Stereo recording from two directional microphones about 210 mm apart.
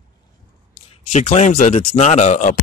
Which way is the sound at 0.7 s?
30° left (ahead or behind).